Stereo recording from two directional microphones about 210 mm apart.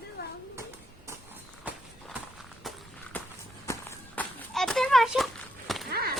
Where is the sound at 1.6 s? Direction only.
Centre (ahead or behind).